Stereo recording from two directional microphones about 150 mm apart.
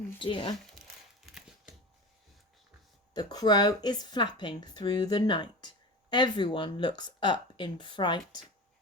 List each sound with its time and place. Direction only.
0.2 s speech: 30° left (ahead or behind)
0.8 s a sound: centre (ahead or behind)
3.2 s speech: 25° left (ahead or behind)